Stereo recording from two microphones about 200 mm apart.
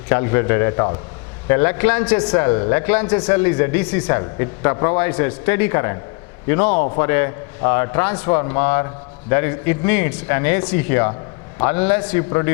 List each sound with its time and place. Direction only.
0.1 s a man's voice: 15° left (ahead or behind)